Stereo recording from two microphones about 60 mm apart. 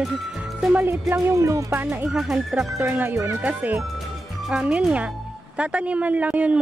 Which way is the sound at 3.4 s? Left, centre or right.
Right.